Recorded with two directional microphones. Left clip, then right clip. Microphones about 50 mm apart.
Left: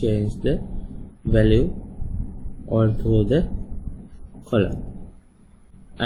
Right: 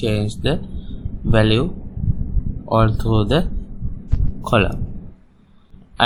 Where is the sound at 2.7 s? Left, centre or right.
Right.